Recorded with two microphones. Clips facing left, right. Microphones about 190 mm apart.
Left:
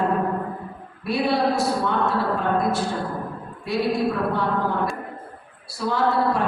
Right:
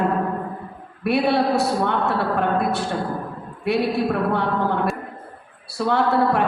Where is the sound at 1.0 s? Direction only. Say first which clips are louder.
Right 3 dB; 65° right (ahead or behind).